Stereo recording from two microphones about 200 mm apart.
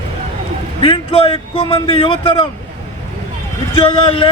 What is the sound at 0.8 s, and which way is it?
Speech, 25° left (ahead or behind).